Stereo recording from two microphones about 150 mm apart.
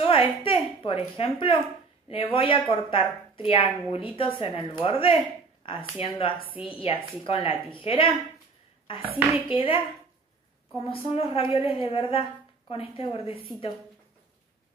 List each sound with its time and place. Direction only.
0.0 s a sound: 35° left (ahead or behind)
0.8 s speech: 40° left (ahead or behind)
9.5 s speech: 35° left (ahead or behind)
10.8 s speech: 40° left (ahead or behind)